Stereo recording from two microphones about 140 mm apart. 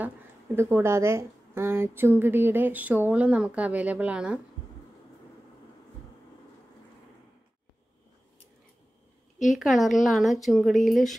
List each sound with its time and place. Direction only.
0.6 s a woman's voice: 20° right (ahead or behind)
9.4 s speech: centre (ahead or behind)